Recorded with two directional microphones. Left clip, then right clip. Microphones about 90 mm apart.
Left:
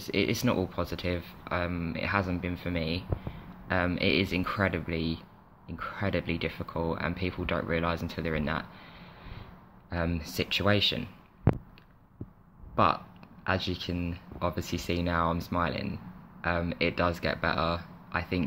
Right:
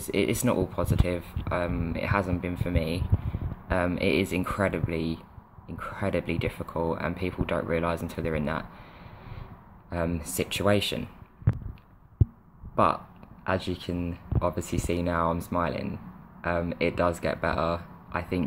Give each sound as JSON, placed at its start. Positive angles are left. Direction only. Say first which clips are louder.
{"t": 0.0, "sound": "speech", "louder": "right 2 dB", "side_deg": -35}
{"t": 9.8, "sound": "speech", "louder": "right 2 dB", "side_deg": -35}
{"t": 12.7, "sound": "speech", "louder": "right 2 dB", "side_deg": -30}